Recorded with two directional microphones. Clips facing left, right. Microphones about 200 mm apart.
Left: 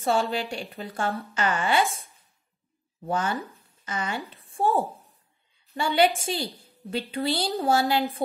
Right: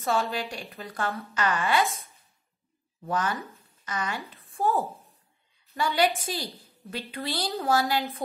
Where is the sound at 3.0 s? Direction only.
30° left (ahead or behind).